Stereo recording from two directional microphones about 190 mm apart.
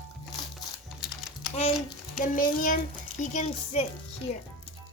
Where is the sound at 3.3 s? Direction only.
35° left (ahead or behind).